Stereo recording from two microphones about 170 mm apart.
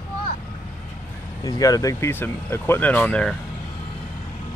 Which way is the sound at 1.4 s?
20° left (ahead or behind).